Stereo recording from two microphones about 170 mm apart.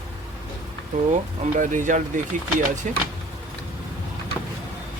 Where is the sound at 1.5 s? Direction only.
50° right (ahead or behind).